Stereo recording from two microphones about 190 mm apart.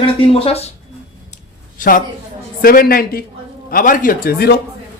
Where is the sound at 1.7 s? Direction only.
45° left (ahead or behind).